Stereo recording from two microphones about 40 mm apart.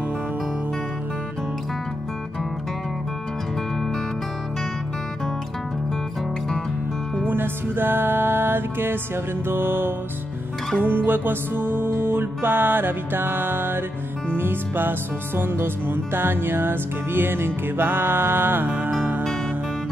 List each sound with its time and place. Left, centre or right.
7.2 s music: right
10.8 s music: right